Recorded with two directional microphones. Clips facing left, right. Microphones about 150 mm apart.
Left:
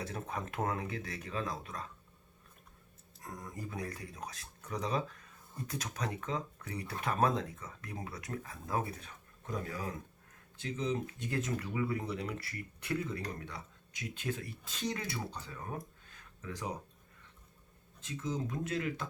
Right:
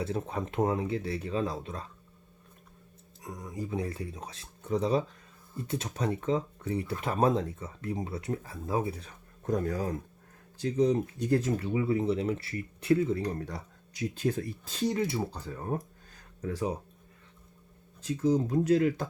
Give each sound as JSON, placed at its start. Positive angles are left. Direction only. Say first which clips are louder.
{"t": 0.0, "sound": "speech", "louder": "right 7 dB", "side_deg": -30}
{"t": 3.2, "sound": "speech", "louder": "right 4 dB", "side_deg": -5}
{"t": 3.5, "sound": "speech", "louder": "right 12 dB", "side_deg": -15}
{"t": 3.8, "sound": "speech", "louder": "right 6 dB", "side_deg": -25}
{"t": 9.0, "sound": "speech", "louder": "right 4 dB", "side_deg": -45}
{"t": 14.9, "sound": "speech", "louder": "right 10 dB", "side_deg": -25}
{"t": 15.4, "sound": "speech", "louder": "right 8 dB", "side_deg": -40}
{"t": 18.0, "sound": "speech", "louder": "right 11 dB", "side_deg": -35}